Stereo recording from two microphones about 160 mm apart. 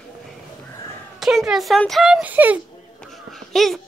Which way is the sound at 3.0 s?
Centre (ahead or behind).